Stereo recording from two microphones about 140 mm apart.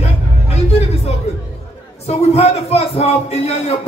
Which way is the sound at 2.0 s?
50° left (ahead or behind).